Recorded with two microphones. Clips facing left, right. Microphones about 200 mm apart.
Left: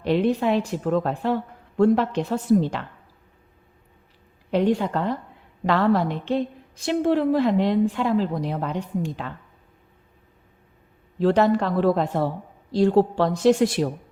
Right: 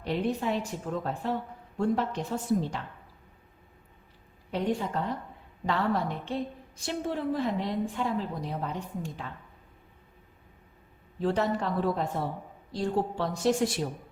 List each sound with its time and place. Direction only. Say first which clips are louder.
0.0 s a woman's voice: left 8 dB; 75° left (ahead or behind)
4.5 s a woman's voice: left 8 dB; 75° left (ahead or behind)
11.2 s a woman's voice: left 9 dB; 80° left